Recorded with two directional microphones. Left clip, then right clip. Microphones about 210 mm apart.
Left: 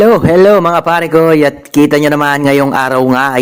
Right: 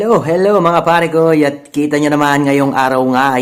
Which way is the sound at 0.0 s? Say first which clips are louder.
Left 6 dB; 35° left (ahead or behind).